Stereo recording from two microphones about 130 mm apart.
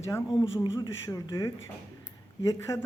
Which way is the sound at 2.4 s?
25° left (ahead or behind).